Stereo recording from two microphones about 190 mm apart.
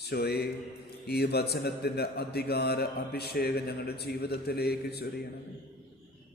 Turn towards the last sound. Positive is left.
turn(degrees=55)  # may be behind; listen again after turning